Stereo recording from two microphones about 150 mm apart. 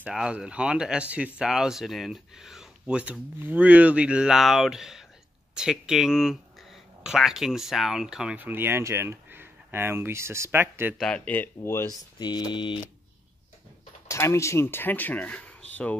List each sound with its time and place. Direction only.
0.0 s speech: 5° right (ahead or behind)
11.0 s speech: 5° left (ahead or behind)
12.2 s a sound: 30° left (ahead or behind)
14.0 s speech: 20° left (ahead or behind)